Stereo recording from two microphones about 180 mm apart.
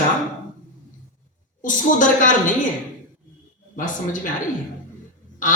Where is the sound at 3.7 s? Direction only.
45° left (ahead or behind).